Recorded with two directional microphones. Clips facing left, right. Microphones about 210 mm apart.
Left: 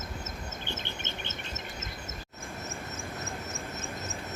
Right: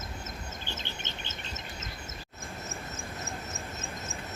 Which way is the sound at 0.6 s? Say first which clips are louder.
Left 2 dB; 55° left (ahead or behind).